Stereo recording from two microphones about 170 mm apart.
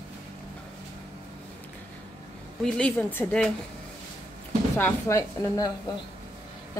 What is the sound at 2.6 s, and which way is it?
Speech, 5° left (ahead or behind).